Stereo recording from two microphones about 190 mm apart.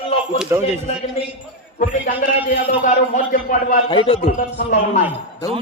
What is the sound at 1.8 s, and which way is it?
A man's voice, 45° left (ahead or behind).